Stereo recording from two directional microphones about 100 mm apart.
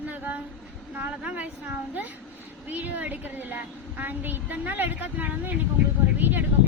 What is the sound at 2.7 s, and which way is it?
A woman's voice, 15° right (ahead or behind).